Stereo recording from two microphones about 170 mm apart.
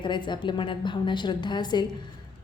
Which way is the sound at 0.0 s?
25° left (ahead or behind).